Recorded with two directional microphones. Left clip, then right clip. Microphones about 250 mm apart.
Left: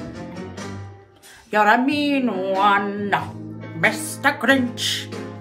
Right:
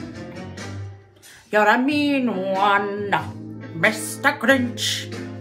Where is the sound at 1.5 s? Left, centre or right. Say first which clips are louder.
Left 1 dB; centre.